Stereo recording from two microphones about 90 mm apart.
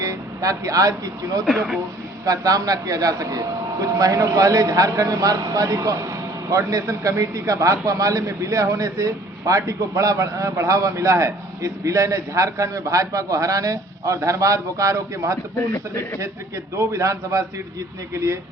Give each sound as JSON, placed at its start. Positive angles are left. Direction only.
{"t": 0.0, "sound": "speech", "side_deg": -40}
{"t": 1.5, "sound": "speech", "side_deg": 0}
{"t": 2.2, "sound": "speech", "side_deg": -40}
{"t": 16.7, "sound": "speech", "side_deg": -35}